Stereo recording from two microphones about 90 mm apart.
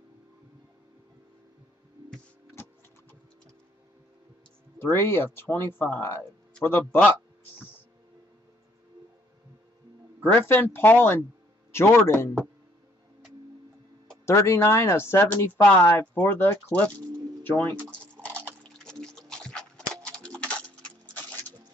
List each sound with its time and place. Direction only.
2.5 s music: 20° left (ahead or behind)
4.7 s speech: 25° left (ahead or behind)
10.2 s speech: 25° left (ahead or behind)
14.2 s speech: 30° left (ahead or behind)
18.2 s a sound: 15° left (ahead or behind)